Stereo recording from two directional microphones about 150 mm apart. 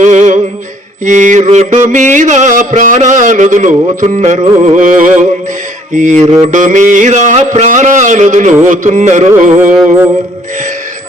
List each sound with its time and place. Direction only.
0.0 s music: 55° right (ahead or behind)
4.0 s carnatic music: 50° right (ahead or behind)
5.9 s music: 55° right (ahead or behind)
8.6 s carnatic music: 55° right (ahead or behind)
9.6 s music: 10° right (ahead or behind)